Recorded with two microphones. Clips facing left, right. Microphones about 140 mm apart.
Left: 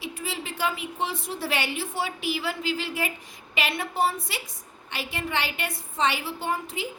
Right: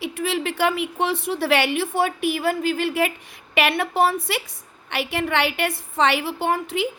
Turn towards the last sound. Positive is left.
turn(degrees=-70)  # may be behind; listen again after turning